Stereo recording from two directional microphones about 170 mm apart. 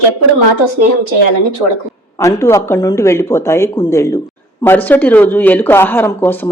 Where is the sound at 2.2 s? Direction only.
15° left (ahead or behind).